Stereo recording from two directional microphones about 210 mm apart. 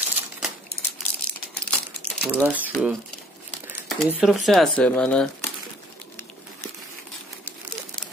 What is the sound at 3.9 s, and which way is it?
Speech, 5° right (ahead or behind).